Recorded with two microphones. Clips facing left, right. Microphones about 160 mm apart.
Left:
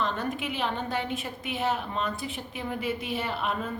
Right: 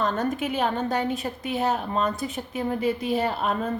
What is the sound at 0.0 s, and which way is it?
A woman's voice, 45° right (ahead or behind).